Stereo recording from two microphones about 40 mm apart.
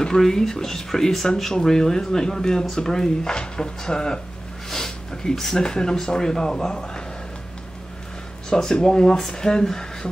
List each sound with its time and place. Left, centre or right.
0.0 s speech: centre
4.6 s a sound: centre
5.6 s speech: centre
8.5 s speech: centre